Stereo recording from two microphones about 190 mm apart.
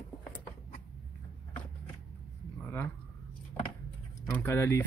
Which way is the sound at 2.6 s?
10° left (ahead or behind).